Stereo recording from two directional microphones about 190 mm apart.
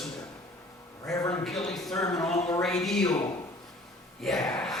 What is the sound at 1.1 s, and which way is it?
Speech, 15° left (ahead or behind).